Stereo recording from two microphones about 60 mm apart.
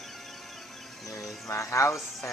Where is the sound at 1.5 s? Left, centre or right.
Left.